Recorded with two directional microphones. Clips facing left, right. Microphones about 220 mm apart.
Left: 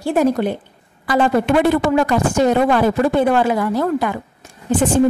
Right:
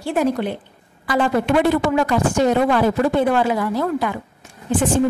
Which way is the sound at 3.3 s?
45° left (ahead or behind).